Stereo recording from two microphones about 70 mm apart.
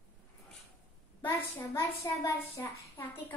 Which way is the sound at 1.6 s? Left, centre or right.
Left.